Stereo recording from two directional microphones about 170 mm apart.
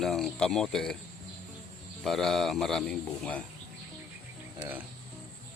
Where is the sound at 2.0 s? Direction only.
Centre (ahead or behind).